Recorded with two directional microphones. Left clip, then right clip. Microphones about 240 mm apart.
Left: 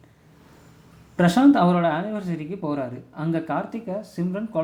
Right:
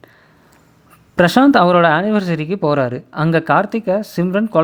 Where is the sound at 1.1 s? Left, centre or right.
Right.